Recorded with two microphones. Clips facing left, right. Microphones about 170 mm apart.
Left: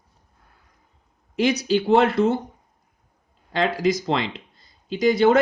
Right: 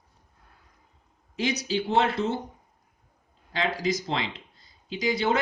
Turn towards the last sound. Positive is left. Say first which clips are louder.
# left 9 dB
turn(degrees=50)  # may be behind; listen again after turning